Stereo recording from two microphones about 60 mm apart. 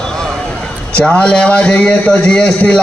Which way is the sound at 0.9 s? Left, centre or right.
Centre.